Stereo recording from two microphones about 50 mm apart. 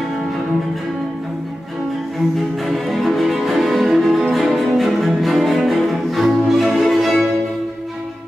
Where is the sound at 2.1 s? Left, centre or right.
Centre.